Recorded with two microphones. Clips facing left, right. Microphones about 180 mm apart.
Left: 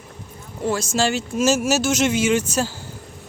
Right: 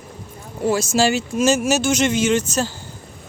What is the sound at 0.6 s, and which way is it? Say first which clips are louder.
Speech: right 3 dB; 5° right (ahead or behind).